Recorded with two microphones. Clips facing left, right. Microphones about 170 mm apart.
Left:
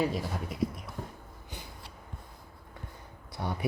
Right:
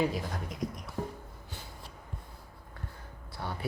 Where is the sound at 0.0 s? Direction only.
5° left (ahead or behind).